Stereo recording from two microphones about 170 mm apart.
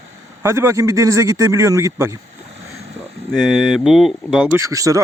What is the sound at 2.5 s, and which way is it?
Vehicle, 40° right (ahead or behind).